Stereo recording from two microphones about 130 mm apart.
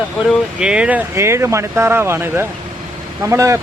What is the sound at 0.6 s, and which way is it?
Speech, 5° right (ahead or behind).